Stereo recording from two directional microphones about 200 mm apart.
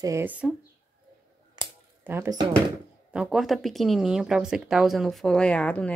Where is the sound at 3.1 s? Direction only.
5° right (ahead or behind).